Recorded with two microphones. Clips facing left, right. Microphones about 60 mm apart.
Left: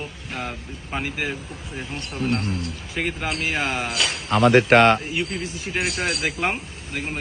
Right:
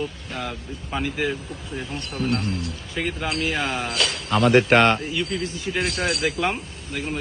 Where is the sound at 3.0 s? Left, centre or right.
Left.